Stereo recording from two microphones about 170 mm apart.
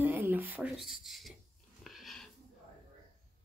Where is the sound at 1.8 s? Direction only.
Centre (ahead or behind).